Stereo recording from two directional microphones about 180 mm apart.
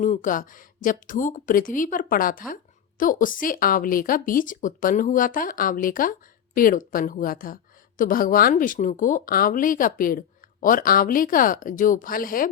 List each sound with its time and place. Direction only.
0.0 s speech: 45° left (ahead or behind)